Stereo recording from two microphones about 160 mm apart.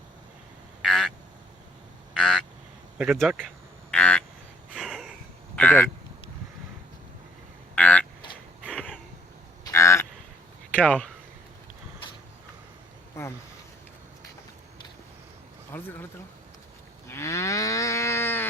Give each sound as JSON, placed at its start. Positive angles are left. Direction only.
{"t": 0.8, "sound": "a sound", "side_deg": 0}
{"t": 2.1, "sound": "frog", "side_deg": 5}
{"t": 3.0, "sound": "speech", "side_deg": -5}
{"t": 3.9, "sound": "frog", "side_deg": 10}
{"t": 4.7, "sound": "a sound", "side_deg": -5}
{"t": 5.5, "sound": "speech", "side_deg": 10}
{"t": 7.8, "sound": "a sound", "side_deg": 10}
{"t": 9.6, "sound": "cattle", "side_deg": 20}
{"t": 10.7, "sound": "speech", "side_deg": 10}
{"t": 13.2, "sound": "a sound", "side_deg": 15}
{"t": 15.7, "sound": "speech", "side_deg": 15}
{"t": 17.1, "sound": "livestock", "side_deg": 15}